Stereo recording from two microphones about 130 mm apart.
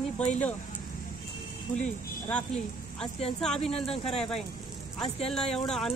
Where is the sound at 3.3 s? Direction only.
5° left (ahead or behind).